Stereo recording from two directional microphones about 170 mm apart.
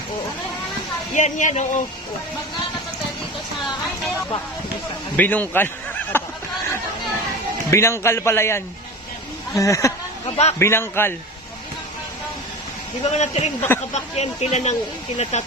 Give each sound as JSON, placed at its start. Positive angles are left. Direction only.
{"t": 1.1, "sound": "speech", "side_deg": 45}
{"t": 5.1, "sound": "a man's voice", "side_deg": 10}
{"t": 6.1, "sound": "snicker", "side_deg": 15}
{"t": 7.7, "sound": "a man's voice", "side_deg": 15}
{"t": 10.2, "sound": "a sound", "side_deg": 35}
{"t": 10.6, "sound": "a man's voice", "side_deg": 15}
{"t": 13.0, "sound": "speech", "side_deg": 40}